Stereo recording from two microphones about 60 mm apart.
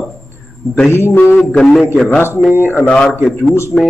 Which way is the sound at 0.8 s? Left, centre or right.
Left.